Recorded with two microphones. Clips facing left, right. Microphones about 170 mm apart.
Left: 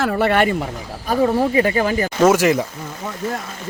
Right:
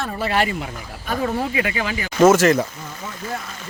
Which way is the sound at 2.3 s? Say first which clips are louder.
Right 1 dB; 15° left (ahead or behind).